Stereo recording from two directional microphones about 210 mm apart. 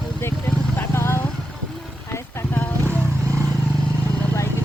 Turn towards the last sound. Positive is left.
turn(degrees=10)  # may be behind; listen again after turning